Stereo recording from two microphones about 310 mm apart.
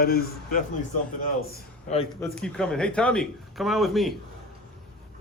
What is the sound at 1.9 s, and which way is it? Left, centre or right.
Speech, left.